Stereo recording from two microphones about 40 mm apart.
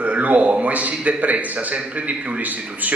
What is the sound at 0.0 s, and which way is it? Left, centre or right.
Speech, right.